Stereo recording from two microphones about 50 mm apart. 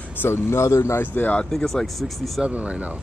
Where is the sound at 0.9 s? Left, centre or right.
Left.